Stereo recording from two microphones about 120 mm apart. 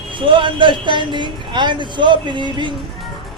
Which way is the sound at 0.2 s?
45° right (ahead or behind).